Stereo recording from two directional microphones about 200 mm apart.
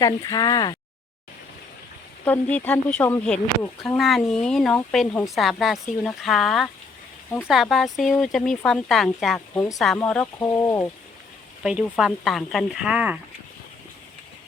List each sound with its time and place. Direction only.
0.0 s speech: 15° left (ahead or behind)
2.2 s speech: 10° left (ahead or behind)
11.6 s speech: 5° right (ahead or behind)